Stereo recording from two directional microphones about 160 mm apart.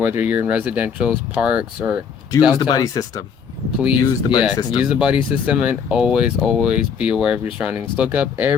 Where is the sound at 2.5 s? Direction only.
25° left (ahead or behind).